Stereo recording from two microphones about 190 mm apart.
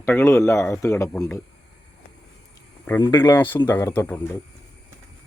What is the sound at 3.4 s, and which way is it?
Speech, 10° left (ahead or behind).